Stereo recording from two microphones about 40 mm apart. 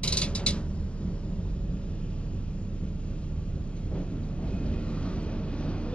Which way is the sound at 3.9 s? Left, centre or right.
Left.